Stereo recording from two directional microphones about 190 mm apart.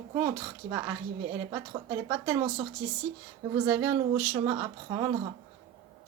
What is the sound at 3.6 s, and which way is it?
A woman's voice, 10° right (ahead or behind).